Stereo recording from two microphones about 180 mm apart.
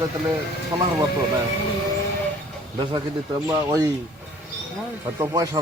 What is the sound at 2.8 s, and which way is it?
Speech, 25° right (ahead or behind).